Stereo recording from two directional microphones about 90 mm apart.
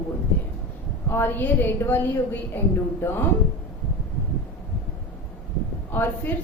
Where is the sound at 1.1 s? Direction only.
25° left (ahead or behind).